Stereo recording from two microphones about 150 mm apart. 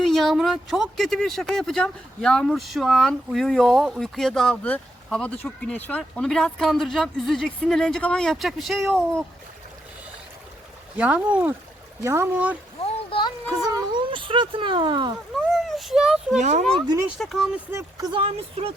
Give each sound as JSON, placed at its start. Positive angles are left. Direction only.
{"t": 0.0, "sound": "speech", "side_deg": 5}
{"t": 10.9, "sound": "speech", "side_deg": -10}
{"t": 12.8, "sound": "a sound", "side_deg": 35}
{"t": 13.5, "sound": "speech", "side_deg": -25}
{"t": 15.4, "sound": "a child's voice", "side_deg": 0}
{"t": 16.4, "sound": "speech", "side_deg": -50}
{"t": 17.2, "sound": "speech", "side_deg": 0}
{"t": 17.7, "sound": "speech", "side_deg": -20}
{"t": 18.2, "sound": "speech", "side_deg": -40}